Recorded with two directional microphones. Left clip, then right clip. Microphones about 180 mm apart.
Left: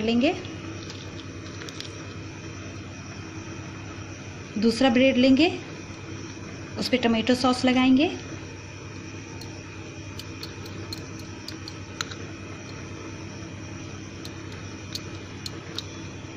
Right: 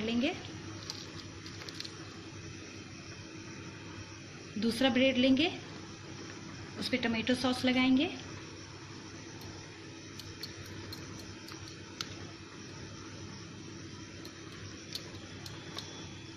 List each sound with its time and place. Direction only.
0.0 s a woman's voice: 35° left (ahead or behind)
4.6 s a woman's voice: 35° left (ahead or behind)
6.8 s a woman's voice: 35° left (ahead or behind)